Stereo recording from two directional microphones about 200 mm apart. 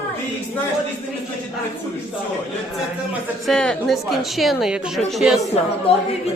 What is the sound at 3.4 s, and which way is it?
Speech, 5° left (ahead or behind).